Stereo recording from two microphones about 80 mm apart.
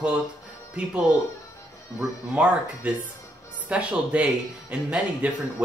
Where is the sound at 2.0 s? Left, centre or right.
Centre.